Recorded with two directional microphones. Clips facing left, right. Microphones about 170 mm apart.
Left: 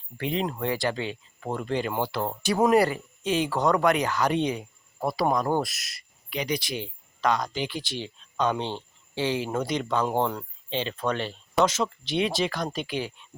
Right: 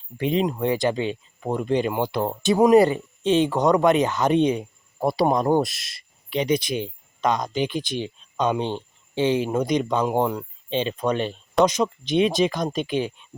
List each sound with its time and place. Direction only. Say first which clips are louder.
0.2 s speech: right 6 dB; 20° right (ahead or behind)